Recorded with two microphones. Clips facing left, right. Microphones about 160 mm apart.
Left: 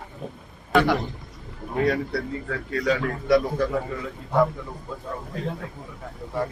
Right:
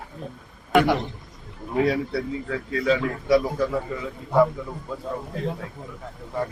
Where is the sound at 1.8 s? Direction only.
5° right (ahead or behind).